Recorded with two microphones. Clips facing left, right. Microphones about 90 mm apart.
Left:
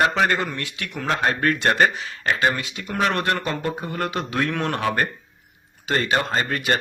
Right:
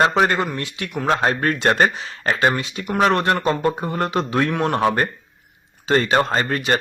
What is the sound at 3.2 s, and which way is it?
Speech, 25° right (ahead or behind).